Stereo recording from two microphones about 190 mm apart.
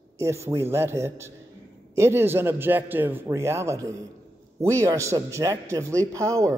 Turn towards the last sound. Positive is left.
turn(degrees=-15)  # may be behind; listen again after turning